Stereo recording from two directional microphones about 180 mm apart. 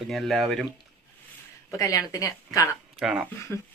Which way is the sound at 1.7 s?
20° left (ahead or behind).